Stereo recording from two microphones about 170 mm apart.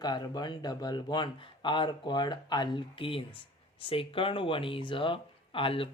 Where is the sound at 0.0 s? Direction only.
25° left (ahead or behind).